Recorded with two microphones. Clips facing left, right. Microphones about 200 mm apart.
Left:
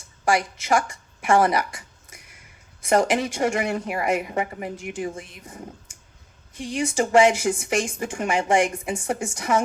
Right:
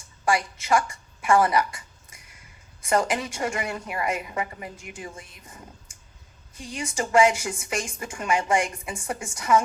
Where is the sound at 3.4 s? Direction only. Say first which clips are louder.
Left 6 dB; 45° left (ahead or behind).